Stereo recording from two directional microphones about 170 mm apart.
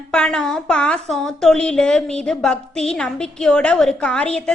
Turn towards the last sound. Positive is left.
turn(degrees=5)  # may be behind; listen again after turning